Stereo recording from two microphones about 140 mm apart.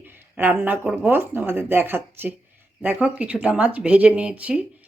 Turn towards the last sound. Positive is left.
turn(degrees=-10)  # may be behind; listen again after turning